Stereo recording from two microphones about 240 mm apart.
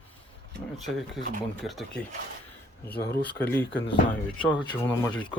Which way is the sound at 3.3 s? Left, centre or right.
Centre.